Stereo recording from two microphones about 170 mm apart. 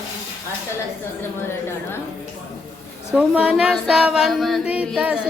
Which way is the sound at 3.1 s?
5° right (ahead or behind).